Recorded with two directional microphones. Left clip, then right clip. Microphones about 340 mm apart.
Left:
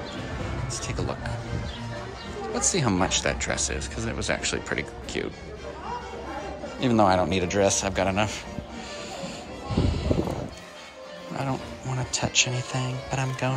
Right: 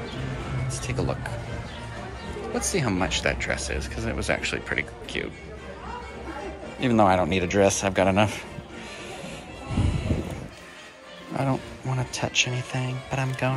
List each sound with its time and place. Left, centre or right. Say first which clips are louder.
0.8 s speech: right 4 dB; centre
2.5 s speech: left 1 dB; centre
6.8 s speech: right 1 dB; centre
11.3 s speech: right 3 dB; centre